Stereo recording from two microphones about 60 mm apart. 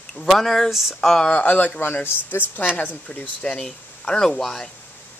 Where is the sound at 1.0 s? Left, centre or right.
Centre.